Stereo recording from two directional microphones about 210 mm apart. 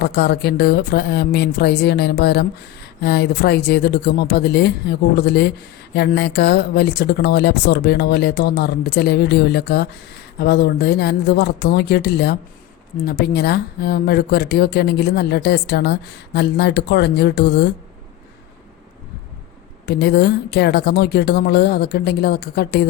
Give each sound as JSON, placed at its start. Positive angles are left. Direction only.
{"t": 0.0, "sound": "speech", "side_deg": 50}
{"t": 19.8, "sound": "speech", "side_deg": 50}